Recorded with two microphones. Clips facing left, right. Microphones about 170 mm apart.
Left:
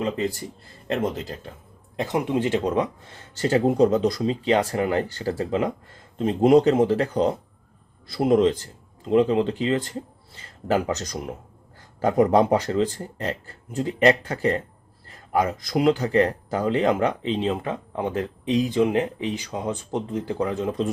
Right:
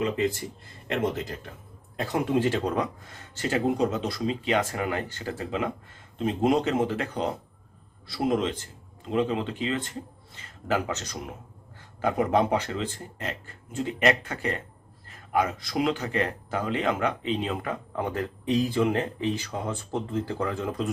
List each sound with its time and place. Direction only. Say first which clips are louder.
2.0 s speech: left 2 dB; 20° left (ahead or behind)